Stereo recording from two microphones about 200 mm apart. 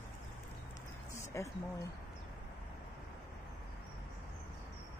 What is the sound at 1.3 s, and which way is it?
Speech, 15° left (ahead or behind).